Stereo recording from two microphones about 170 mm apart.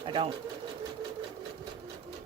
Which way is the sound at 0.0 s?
30° right (ahead or behind).